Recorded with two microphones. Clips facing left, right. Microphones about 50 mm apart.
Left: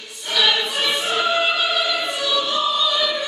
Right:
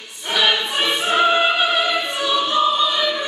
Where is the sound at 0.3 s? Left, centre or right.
Right.